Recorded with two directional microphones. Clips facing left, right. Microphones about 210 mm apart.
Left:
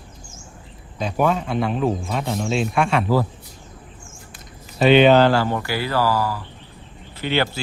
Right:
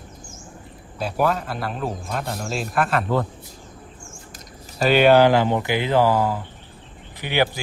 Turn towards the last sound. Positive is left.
turn(degrees=-15)  # may be behind; listen again after turning